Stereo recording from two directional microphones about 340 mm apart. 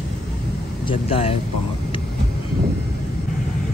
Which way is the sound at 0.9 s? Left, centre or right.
Centre.